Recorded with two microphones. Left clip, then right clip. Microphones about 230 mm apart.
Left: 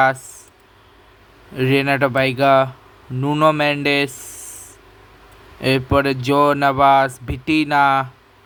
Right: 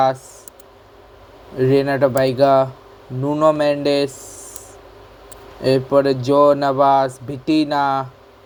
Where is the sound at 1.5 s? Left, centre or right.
Left.